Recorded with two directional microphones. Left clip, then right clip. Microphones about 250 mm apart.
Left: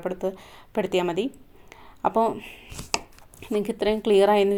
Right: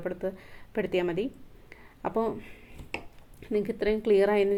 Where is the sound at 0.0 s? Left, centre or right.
Left.